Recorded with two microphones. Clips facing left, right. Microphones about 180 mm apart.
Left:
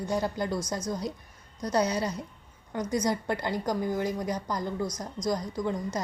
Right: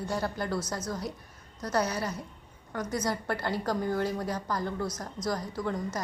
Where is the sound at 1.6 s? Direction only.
20° left (ahead or behind).